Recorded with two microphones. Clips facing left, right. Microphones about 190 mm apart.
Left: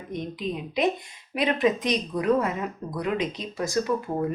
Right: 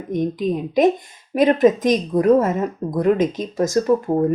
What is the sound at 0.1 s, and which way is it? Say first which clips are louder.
A woman's voice: right 10 dB; 45° right (ahead or behind).